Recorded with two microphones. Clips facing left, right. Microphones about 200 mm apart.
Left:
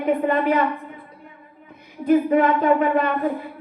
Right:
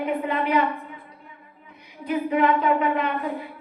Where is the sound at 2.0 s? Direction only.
45° left (ahead or behind).